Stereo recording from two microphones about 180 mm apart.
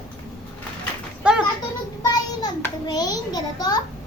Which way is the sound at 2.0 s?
20° left (ahead or behind).